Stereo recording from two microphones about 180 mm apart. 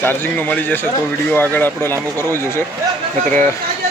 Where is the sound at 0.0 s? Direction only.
10° left (ahead or behind).